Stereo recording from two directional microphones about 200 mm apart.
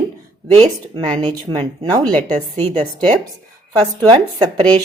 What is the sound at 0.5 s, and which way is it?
A woman's voice, 35° right (ahead or behind).